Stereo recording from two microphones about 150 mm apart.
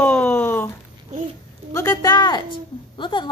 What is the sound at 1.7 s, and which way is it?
A woman's voice, 25° left (ahead or behind).